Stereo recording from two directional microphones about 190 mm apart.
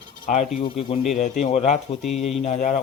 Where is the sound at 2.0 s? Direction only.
Centre (ahead or behind).